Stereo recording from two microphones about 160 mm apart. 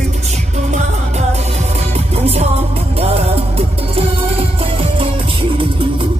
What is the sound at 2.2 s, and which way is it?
Music, 40° right (ahead or behind).